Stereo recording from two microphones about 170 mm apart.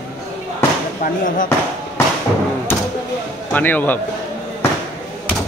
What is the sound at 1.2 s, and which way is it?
Speech, 50° left (ahead or behind).